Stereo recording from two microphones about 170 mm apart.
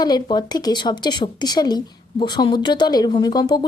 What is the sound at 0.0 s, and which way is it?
Speech, 25° left (ahead or behind).